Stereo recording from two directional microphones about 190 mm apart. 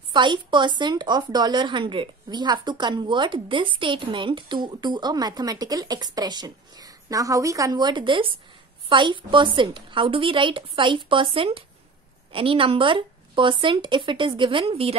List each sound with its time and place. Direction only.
0.1 s a woman's voice: 25° right (ahead or behind)